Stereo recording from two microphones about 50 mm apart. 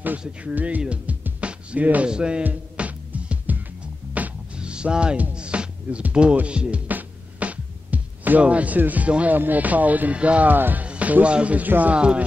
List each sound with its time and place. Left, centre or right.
0.2 s speech: right
2.4 s music: right
4.6 s music: centre
5.3 s speech: centre
6.9 s music: right
9.3 s speech: right
10.9 s music: right
11.3 s speech: right
11.6 s speech: right
11.9 s speech: right